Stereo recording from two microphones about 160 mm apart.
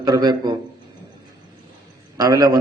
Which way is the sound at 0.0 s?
25° right (ahead or behind).